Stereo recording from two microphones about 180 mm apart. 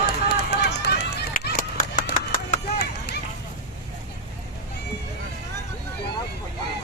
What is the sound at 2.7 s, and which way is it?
Run, 65° left (ahead or behind).